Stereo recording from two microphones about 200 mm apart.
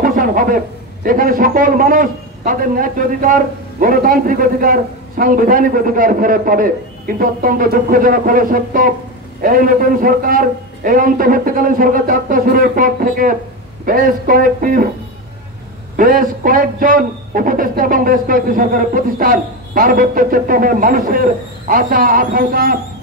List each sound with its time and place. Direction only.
0.0 s a man's voice: 45° right (ahead or behind)
16.0 s a man's voice: 45° right (ahead or behind)